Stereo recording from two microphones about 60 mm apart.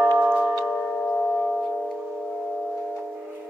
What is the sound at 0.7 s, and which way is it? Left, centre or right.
Singing bowl, centre.